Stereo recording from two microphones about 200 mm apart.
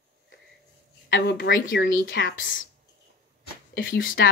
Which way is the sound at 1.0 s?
60° left (ahead or behind).